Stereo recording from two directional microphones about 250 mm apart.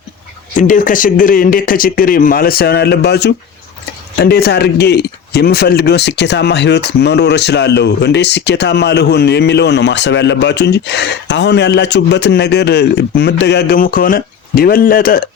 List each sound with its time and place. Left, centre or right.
0.5 s speech: left